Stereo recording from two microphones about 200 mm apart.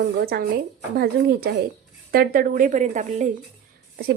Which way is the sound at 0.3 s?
50° right (ahead or behind).